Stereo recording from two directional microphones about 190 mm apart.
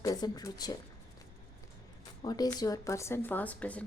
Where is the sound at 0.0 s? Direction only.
20° left (ahead or behind).